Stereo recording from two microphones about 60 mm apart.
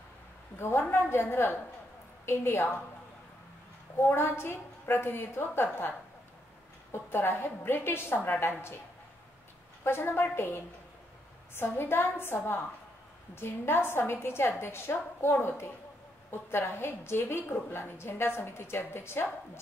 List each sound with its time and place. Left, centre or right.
0.6 s a woman's voice: left
4.0 s a woman's voice: left
9.8 s a woman's voice: left